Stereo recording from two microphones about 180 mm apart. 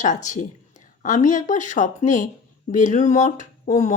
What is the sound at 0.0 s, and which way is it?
Speech, 45° left (ahead or behind).